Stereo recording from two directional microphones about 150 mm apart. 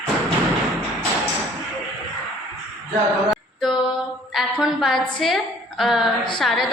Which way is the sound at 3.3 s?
Centre (ahead or behind).